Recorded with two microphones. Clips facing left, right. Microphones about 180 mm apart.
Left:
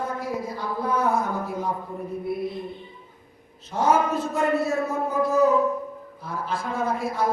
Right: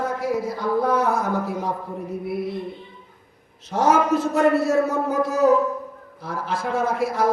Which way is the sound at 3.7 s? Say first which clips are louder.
Right 3 dB; 85° right.